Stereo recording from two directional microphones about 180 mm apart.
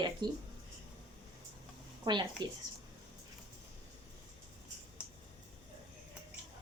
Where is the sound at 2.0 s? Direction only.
25° right (ahead or behind).